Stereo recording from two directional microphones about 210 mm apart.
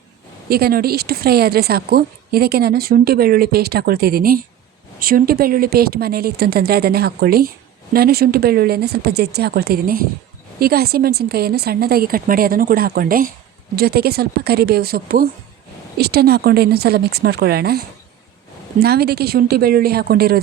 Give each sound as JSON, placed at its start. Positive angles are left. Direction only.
{"t": 0.5, "sound": "speech", "side_deg": -45}